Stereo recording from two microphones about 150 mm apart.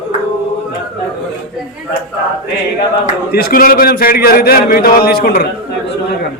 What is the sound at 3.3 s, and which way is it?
A man's voice, 80° left.